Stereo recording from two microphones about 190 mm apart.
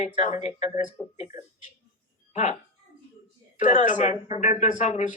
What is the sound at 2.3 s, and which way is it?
Speech, 35° left (ahead or behind).